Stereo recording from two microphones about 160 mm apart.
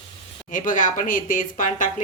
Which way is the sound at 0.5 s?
55° left (ahead or behind).